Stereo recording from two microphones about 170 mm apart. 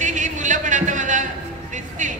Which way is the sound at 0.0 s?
45° right (ahead or behind).